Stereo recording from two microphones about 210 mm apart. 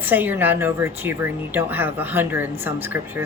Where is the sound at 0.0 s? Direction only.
10° right (ahead or behind).